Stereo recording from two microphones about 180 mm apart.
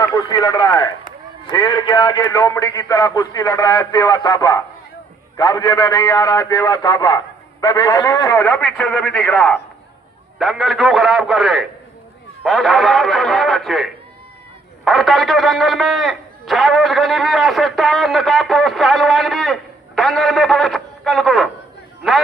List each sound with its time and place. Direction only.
0.1 s speech: 20° left (ahead or behind)
8.7 s a man's voice: centre (ahead or behind)